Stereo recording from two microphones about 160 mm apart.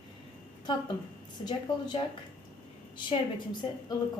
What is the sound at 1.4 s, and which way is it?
Speech, 30° left (ahead or behind).